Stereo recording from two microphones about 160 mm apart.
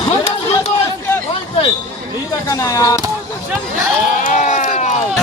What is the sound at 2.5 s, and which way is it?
Speech, 20° left (ahead or behind).